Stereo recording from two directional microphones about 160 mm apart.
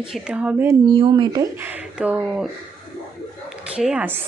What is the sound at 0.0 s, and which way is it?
Speech, 5° right (ahead or behind).